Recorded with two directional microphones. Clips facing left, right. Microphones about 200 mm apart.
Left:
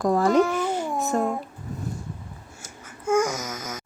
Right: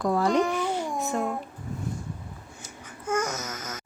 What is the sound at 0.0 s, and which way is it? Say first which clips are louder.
Speech: left 3 dB; 45° left (ahead or behind).